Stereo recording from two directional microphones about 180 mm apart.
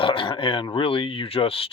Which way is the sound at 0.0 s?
30° left (ahead or behind).